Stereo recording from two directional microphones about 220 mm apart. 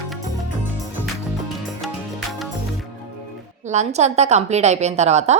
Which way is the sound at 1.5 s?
Centre (ahead or behind).